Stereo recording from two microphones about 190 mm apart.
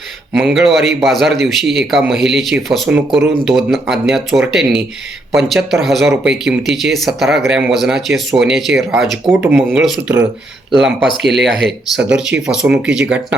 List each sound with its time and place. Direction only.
0.3 s speech: centre (ahead or behind)